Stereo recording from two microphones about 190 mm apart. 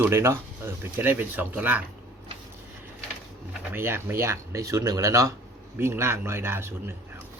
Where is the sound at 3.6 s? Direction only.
10° right (ahead or behind).